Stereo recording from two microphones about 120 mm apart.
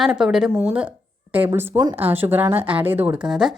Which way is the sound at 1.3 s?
15° right (ahead or behind).